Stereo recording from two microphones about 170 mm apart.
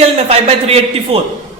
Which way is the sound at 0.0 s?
35° right (ahead or behind).